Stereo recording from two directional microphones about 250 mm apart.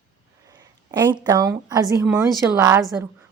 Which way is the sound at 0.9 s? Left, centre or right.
Centre.